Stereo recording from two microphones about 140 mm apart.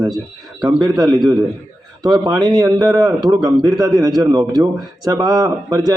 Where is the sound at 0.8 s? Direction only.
25° right (ahead or behind).